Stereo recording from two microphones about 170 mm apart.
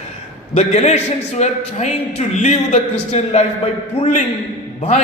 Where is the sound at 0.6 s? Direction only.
40° left (ahead or behind).